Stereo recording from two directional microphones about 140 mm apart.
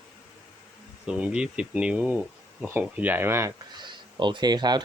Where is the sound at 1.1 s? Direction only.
5° right (ahead or behind).